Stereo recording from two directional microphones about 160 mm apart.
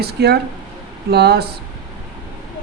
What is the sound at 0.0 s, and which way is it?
Speech, 90° right.